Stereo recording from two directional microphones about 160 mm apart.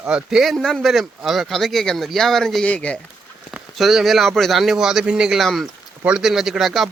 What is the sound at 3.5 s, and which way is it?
Speech, centre (ahead or behind).